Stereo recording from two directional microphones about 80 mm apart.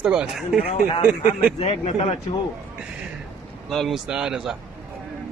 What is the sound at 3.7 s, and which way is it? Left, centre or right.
Speech, centre.